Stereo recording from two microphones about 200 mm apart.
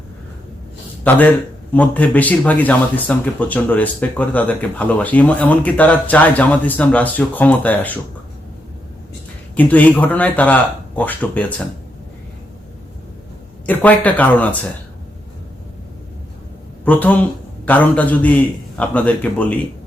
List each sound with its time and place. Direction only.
1.1 s speech: 5° left (ahead or behind)
9.6 s speech: 10° left (ahead or behind)
13.8 s speech: 10° left (ahead or behind)
16.8 s speech: 10° left (ahead or behind)